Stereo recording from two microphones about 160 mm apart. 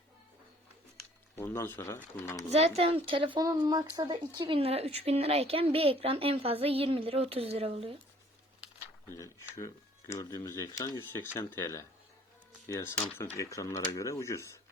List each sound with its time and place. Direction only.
1.4 s speech: 15° left (ahead or behind)
2.5 s speech: 40° right (ahead or behind)
9.0 s speech: 20° left (ahead or behind)